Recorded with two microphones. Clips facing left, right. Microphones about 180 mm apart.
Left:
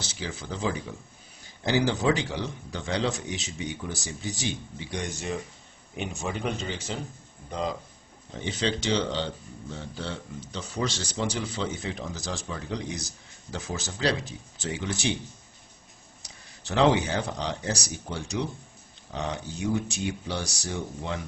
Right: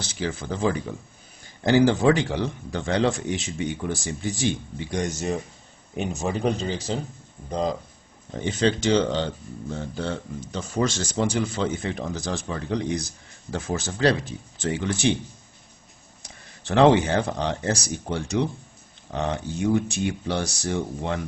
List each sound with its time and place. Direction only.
0.0 s speech: 55° right (ahead or behind); by 7.7 s 35° right (ahead or behind)
8.4 s speech: 50° right (ahead or behind)
16.2 s speech: 55° right (ahead or behind)